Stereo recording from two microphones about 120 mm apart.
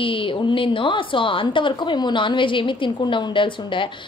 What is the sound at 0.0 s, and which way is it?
A woman's voice, 45° left (ahead or behind).